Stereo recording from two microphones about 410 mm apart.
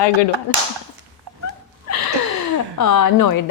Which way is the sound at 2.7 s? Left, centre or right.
Left.